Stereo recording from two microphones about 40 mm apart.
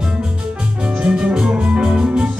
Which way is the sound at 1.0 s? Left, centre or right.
Right.